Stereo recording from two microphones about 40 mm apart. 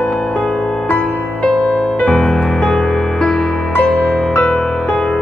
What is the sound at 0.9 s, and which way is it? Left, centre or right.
Music, centre.